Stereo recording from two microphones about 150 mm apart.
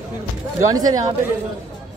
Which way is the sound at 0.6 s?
25° right (ahead or behind).